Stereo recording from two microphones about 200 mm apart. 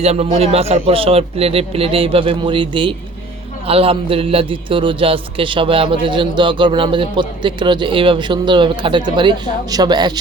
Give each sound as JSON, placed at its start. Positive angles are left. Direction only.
{"t": 0.0, "sound": "a man's voice", "side_deg": -30}